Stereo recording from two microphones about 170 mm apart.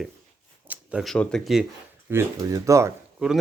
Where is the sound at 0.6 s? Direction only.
10° right (ahead or behind).